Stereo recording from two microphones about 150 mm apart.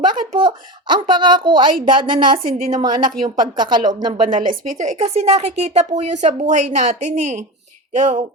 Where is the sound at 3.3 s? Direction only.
30° right (ahead or behind).